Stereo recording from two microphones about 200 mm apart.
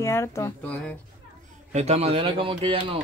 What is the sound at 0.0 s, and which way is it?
Speech, 15° left (ahead or behind).